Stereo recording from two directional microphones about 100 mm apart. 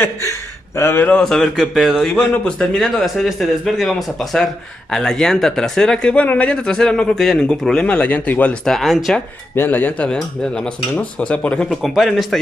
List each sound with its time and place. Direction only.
0.0 s speech: 30° left (ahead or behind)
1.1 s a man's voice: 5° left (ahead or behind)
9.6 s a man's voice: 20° left (ahead or behind); by 12.4 s centre (ahead or behind)